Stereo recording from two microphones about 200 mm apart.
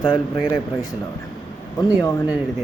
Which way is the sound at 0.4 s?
20° left (ahead or behind).